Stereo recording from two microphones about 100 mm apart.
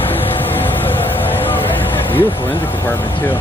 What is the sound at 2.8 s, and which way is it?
Speech, 20° left (ahead or behind).